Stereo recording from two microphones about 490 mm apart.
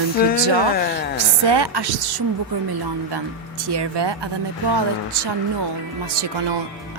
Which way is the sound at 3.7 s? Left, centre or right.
Right.